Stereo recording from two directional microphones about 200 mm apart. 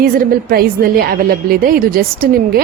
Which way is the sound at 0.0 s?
45° right (ahead or behind).